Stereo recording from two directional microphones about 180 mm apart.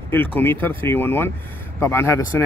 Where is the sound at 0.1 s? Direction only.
10° left (ahead or behind).